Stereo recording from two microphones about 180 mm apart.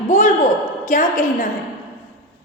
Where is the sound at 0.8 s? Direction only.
45° left (ahead or behind).